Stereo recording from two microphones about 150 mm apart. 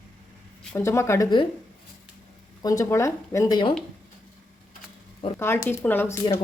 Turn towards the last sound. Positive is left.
turn(degrees=15)  # may be behind; listen again after turning